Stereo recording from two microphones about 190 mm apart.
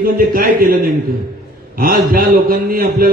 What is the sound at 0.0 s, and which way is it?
A man's voice, 50° right (ahead or behind).